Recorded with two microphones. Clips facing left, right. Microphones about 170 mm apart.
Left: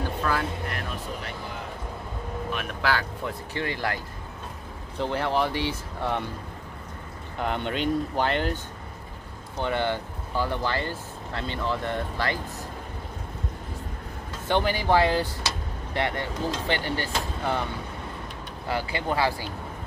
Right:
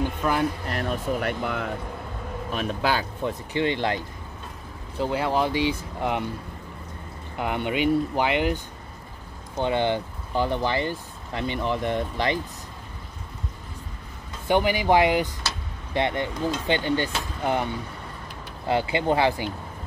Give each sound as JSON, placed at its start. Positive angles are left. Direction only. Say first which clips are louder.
{"t": 0.2, "sound": "speech", "louder": "right 3 dB", "side_deg": -20}
{"t": 0.7, "sound": "speech", "louder": "right 6 dB", "side_deg": -35}
{"t": 1.2, "sound": "speech", "louder": "right 9 dB", "side_deg": -65}
{"t": 2.5, "sound": "speech", "louder": "right 3 dB", "side_deg": -30}
{"t": 4.9, "sound": "speech", "louder": "right 2 dB", "side_deg": -10}
{"t": 7.3, "sound": "speech", "louder": "right 2 dB", "side_deg": -10}
{"t": 9.6, "sound": "speech", "louder": "right 3 dB", "side_deg": -20}
{"t": 14.5, "sound": "speech", "louder": "right 3 dB", "side_deg": -15}
{"t": 18.7, "sound": "speech", "louder": "right 6 dB", "side_deg": -25}